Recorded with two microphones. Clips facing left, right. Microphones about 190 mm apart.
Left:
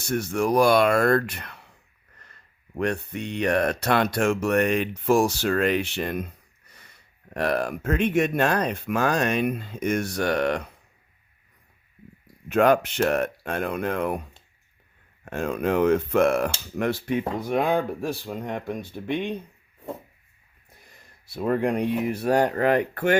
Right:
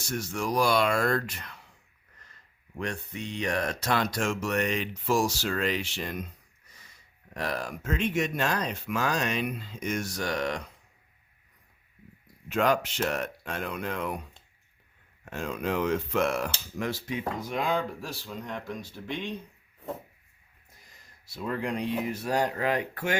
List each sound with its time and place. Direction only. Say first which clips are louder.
0.0 s speech: left 7 dB; 60° left (ahead or behind)
12.5 s speech: left 6 dB; 55° left (ahead or behind)
21.2 s speech: left 8 dB; 55° left (ahead or behind)